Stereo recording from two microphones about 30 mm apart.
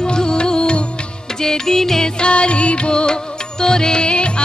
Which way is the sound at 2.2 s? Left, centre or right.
Left.